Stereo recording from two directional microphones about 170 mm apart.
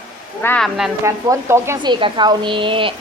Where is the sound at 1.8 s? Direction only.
25° right (ahead or behind).